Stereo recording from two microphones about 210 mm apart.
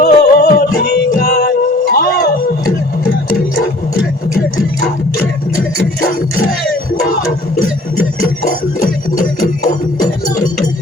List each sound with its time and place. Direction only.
0.0 s music: 45° left (ahead or behind)